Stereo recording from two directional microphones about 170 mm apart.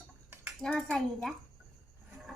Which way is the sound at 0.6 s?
5° left (ahead or behind).